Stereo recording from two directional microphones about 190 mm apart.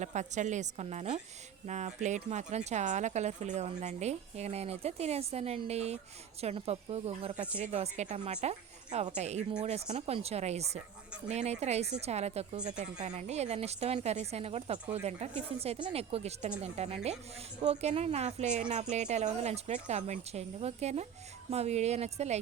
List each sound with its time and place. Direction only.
0.0 s speech: 40° right (ahead or behind)